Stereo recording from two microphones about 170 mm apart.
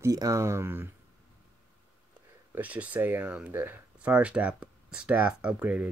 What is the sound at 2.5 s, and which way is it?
Speech, 10° right (ahead or behind).